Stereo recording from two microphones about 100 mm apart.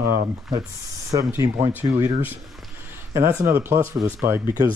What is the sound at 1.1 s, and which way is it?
Speech, 45° right (ahead or behind).